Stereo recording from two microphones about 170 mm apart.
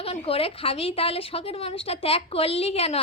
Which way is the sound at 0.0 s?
35° left (ahead or behind).